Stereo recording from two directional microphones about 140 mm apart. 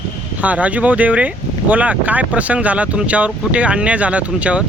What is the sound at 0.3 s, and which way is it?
Speech, 10° right (ahead or behind).